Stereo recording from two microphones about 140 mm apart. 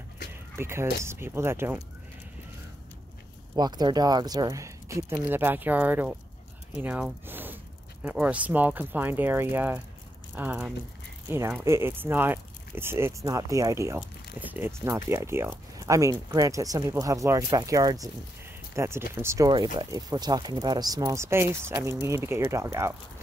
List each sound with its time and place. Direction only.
0.3 s a sound: 20° right (ahead or behind)
1.0 s speech: 15° right (ahead or behind)
3.5 s speech: 30° right (ahead or behind); by 6.1 s 10° right (ahead or behind)
6.7 s a sound: 5° right (ahead or behind)
8.0 s speech: 10° right (ahead or behind)
13.9 s speech: 10° right (ahead or behind)
19.5 s speech: 35° right (ahead or behind); by 22.9 s 20° right (ahead or behind)